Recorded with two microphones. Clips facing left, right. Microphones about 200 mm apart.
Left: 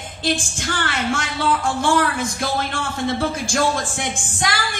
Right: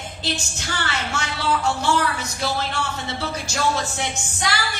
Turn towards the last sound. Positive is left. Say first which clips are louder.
# left 2 dB
turn(degrees=50)  # may be behind; listen again after turning